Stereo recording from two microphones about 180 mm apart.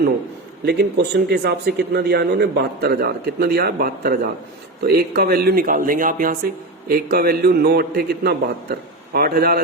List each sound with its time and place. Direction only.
0.6 s speech: 70° right (ahead or behind)